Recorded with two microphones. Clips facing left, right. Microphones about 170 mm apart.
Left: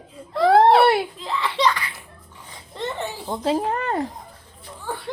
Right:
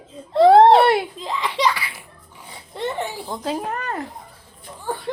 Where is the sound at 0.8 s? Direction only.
5° left (ahead or behind).